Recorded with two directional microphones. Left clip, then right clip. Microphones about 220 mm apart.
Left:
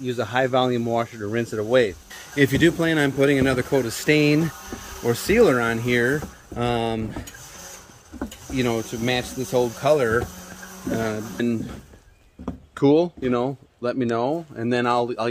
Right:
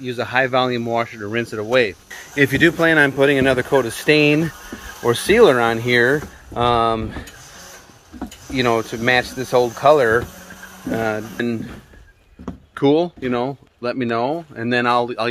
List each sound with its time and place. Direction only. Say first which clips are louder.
0.0 s speech: right 3 dB; 5° right (ahead or behind)
8.6 s speech: right 8 dB; 40° right (ahead or behind)
11.0 s speech: right 5 dB; centre (ahead or behind)